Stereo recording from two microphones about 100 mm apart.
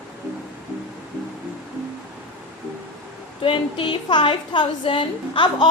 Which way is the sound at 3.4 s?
55° left (ahead or behind).